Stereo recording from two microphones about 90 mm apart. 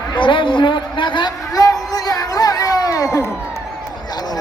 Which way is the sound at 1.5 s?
40° left (ahead or behind).